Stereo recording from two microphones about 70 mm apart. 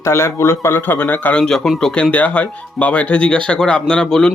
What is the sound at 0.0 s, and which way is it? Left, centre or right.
Speech, left.